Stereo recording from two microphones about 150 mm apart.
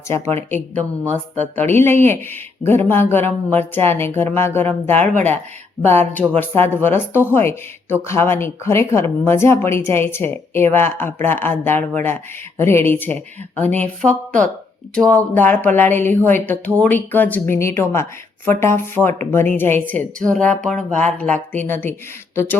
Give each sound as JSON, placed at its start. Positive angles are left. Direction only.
{"t": 1.1, "sound": "speech", "side_deg": 10}